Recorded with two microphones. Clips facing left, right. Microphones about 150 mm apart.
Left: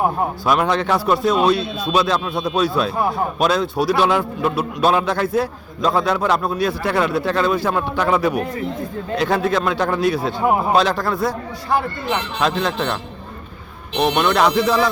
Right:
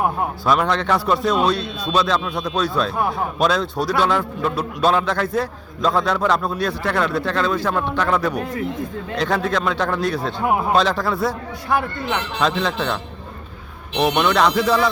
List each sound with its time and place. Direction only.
0.4 s a man's voice: 10° left (ahead or behind)